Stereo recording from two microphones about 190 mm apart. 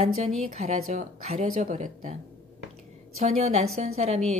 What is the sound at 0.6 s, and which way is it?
Speech, 35° right (ahead or behind).